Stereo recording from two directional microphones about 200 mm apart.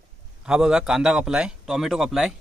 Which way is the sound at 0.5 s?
5° right (ahead or behind).